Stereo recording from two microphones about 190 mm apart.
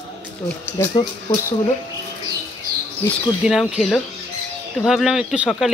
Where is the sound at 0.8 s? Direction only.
20° left (ahead or behind).